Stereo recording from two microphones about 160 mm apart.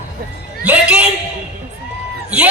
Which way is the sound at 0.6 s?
5° right (ahead or behind).